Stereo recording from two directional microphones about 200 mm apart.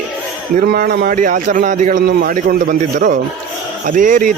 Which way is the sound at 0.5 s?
45° right (ahead or behind).